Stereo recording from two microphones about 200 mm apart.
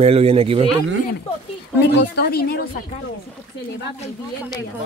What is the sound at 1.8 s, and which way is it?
Speech, 55° left (ahead or behind).